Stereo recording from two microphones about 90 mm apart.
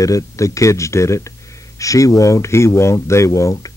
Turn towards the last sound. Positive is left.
turn(degrees=40)  # may be behind; listen again after turning